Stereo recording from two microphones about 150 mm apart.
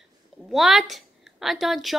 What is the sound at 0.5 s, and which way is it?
A woman's voice, centre (ahead or behind).